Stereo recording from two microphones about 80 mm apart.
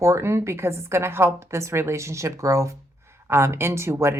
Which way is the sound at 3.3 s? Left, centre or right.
Right.